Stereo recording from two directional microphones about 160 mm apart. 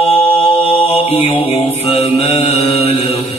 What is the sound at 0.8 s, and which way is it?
Mantra, 40° left (ahead or behind).